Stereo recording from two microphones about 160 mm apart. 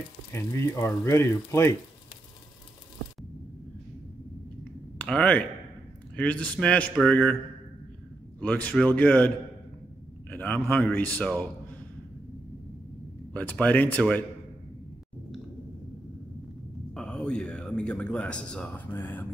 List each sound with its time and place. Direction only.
0.3 s speech: 15° left (ahead or behind)
4.9 s speech: 5° left (ahead or behind)
8.4 s speech: 10° left (ahead or behind)
10.3 s speech: 10° left (ahead or behind)
13.3 s speech: 10° left (ahead or behind)
16.9 s a man's voice: 5° left (ahead or behind)